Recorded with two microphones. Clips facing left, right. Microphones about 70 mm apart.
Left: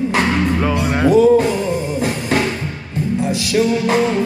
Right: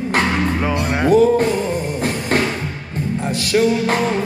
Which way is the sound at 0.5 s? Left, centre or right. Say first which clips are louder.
Left 2 dB; centre.